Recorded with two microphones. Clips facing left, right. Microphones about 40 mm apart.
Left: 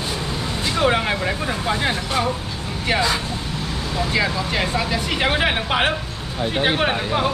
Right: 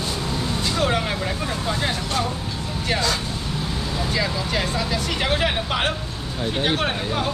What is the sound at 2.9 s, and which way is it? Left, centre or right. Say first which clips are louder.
Speech: left 3 dB; centre.